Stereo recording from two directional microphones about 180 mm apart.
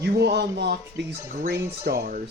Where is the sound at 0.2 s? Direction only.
70° right (ahead or behind).